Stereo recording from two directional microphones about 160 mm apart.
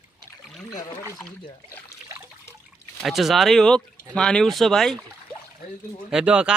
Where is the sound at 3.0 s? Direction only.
Centre (ahead or behind).